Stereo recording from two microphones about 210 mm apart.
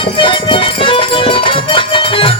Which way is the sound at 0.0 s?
25° left (ahead or behind).